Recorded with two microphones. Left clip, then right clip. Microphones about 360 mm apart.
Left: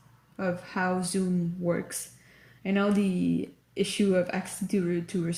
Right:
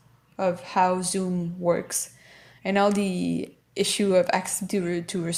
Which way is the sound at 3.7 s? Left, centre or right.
Centre.